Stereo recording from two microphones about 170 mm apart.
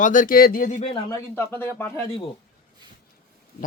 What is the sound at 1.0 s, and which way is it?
Speech, 15° left (ahead or behind).